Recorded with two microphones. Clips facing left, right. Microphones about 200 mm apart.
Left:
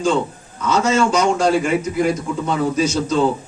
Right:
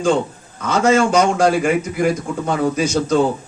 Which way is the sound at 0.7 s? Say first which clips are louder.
Right 2 dB; 55° right (ahead or behind).